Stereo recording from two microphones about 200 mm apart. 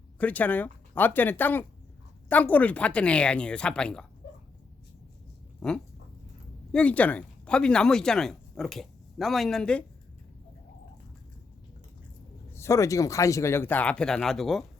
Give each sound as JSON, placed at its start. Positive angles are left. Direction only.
{"t": 0.2, "sound": "speech", "side_deg": 5}
{"t": 4.2, "sound": "dog", "side_deg": 55}
{"t": 5.5, "sound": "dog", "side_deg": 5}
{"t": 6.7, "sound": "speech", "side_deg": 5}
{"t": 12.5, "sound": "speech", "side_deg": 15}